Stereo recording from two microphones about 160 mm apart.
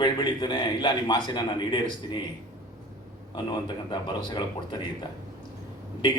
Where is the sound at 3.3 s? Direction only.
30° left (ahead or behind).